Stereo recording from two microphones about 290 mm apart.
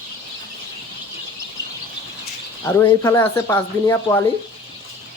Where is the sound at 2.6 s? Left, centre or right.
Centre.